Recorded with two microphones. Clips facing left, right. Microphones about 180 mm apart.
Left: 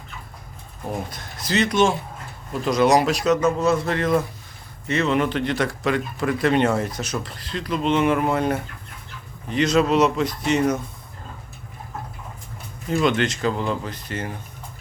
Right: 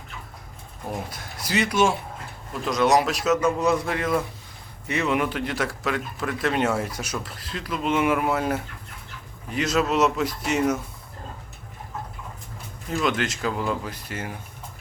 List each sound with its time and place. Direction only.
1.1 s speech: 10° right (ahead or behind)
3.6 s speech: 15° right (ahead or behind)
12.9 s speech: centre (ahead or behind)